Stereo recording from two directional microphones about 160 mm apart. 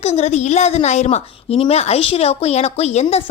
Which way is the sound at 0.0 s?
45° left (ahead or behind).